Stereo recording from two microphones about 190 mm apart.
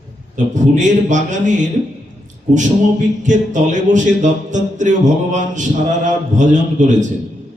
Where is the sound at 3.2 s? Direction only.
40° right (ahead or behind).